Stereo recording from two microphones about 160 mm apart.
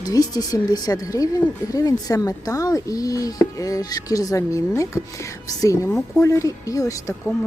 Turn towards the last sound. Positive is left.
turn(degrees=20)  # may be behind; listen again after turning